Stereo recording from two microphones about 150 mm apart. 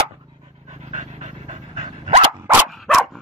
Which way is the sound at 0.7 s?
50° right (ahead or behind).